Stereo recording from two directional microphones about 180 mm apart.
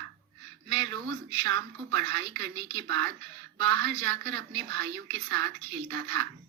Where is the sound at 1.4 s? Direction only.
80° right.